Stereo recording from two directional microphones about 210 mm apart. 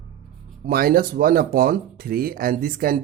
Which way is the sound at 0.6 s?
45° right (ahead or behind).